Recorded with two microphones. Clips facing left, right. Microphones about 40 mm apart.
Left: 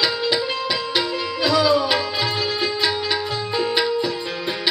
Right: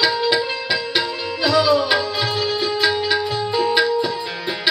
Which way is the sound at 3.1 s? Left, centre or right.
Centre.